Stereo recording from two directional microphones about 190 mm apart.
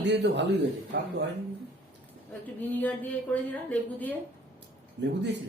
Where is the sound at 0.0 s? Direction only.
65° right (ahead or behind).